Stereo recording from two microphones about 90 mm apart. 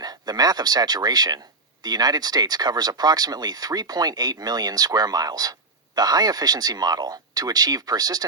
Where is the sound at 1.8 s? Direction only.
50° right (ahead or behind).